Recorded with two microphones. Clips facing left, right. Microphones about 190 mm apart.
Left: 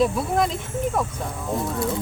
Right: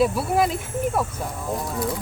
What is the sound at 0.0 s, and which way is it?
Speech, 5° right (ahead or behind).